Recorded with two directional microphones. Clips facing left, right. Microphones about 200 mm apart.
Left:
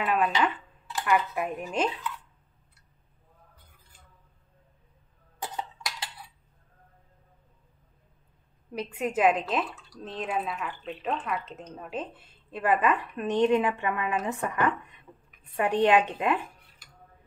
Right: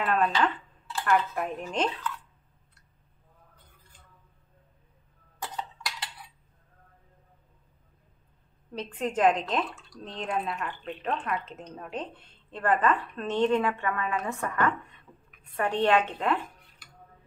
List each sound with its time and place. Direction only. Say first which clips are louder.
0.0 s speech: even; 5° left (ahead or behind)
0.3 s speech: even; 15° left (ahead or behind)
5.4 s cutlery: left 1 dB; 15° left (ahead or behind)
8.7 s speech: left 1 dB; 10° left (ahead or behind)